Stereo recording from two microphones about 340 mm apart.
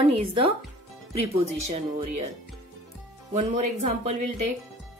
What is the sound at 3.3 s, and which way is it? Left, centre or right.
Speech, centre.